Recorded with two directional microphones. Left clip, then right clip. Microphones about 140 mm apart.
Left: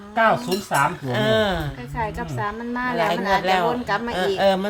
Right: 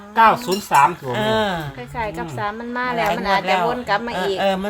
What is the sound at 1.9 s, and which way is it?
A woman's voice, 65° right (ahead or behind).